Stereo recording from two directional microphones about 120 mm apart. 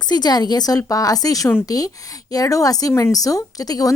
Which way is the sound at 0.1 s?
35° left (ahead or behind).